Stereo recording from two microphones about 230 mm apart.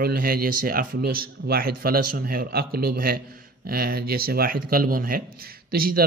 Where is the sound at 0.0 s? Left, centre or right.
Right.